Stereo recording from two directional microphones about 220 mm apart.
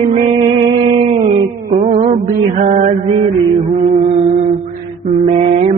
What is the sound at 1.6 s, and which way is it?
Mantra, 35° right (ahead or behind).